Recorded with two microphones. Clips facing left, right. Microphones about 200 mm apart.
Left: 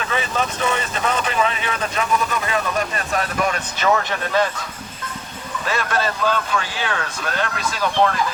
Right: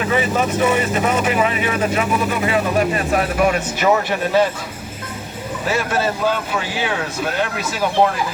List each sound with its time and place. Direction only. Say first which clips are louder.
0.0 s speech: right 5 dB; 15° right (ahead or behind)
5.6 s speech: right 3 dB; 10° right (ahead or behind)